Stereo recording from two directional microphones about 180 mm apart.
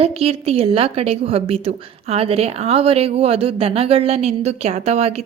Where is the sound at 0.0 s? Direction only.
35° right (ahead or behind).